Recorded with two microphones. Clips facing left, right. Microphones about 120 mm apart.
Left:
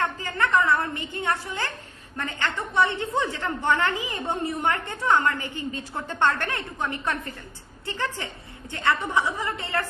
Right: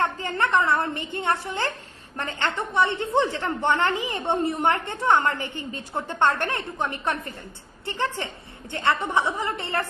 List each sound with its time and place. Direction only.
0.2 s a woman's voice: 25° right (ahead or behind)